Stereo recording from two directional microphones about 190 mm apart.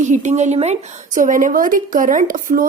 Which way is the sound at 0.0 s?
40° right (ahead or behind).